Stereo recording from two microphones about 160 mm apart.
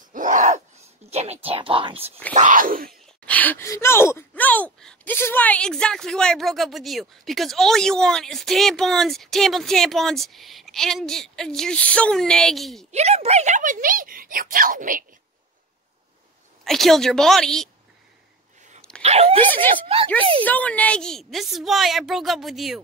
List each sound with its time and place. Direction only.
0.1 s a sound: 50° right (ahead or behind); by 2.1 s 35° right (ahead or behind)
2.3 s speech: 55° right (ahead or behind)
2.9 s speech: 10° left (ahead or behind)
12.9 s speech: 40° right (ahead or behind); by 15.0 s 60° right (ahead or behind)
16.6 s speech: centre (ahead or behind)
19.0 s speech: 40° right (ahead or behind)
19.4 s speech: 10° left (ahead or behind)
19.7 s speech: 35° right (ahead or behind)
20.4 s speech: 10° left (ahead or behind)